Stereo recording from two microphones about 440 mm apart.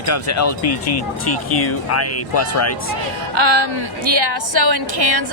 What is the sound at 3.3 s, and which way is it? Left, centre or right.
Speech, right.